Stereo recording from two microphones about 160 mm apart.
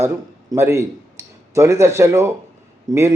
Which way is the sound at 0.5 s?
15° right (ahead or behind).